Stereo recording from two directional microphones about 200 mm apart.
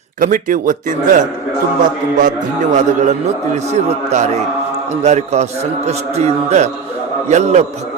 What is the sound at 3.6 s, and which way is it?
A man's voice, 35° right (ahead or behind).